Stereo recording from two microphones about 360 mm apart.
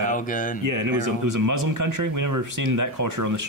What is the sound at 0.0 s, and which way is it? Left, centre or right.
Speech, left.